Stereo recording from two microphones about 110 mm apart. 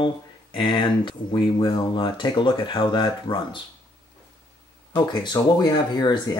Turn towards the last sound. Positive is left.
turn(degrees=40)  # may be behind; listen again after turning